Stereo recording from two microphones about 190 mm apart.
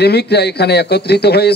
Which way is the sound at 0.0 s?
60° left (ahead or behind).